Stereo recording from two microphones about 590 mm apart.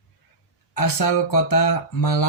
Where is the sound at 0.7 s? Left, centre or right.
Left.